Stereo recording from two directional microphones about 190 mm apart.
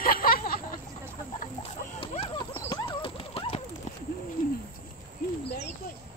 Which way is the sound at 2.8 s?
30° left (ahead or behind).